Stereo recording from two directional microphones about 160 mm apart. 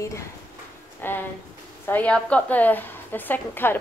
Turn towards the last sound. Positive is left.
turn(degrees=15)  # may be behind; listen again after turning